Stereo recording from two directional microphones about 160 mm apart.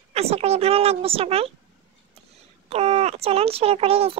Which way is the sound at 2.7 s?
40° right (ahead or behind).